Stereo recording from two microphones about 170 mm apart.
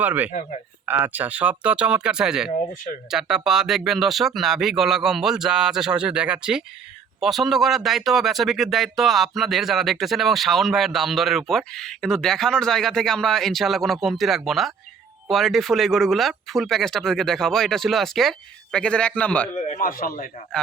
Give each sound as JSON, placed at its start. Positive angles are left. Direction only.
{"t": 0.0, "sound": "speech", "side_deg": -10}
{"t": 19.7, "sound": "speech", "side_deg": 55}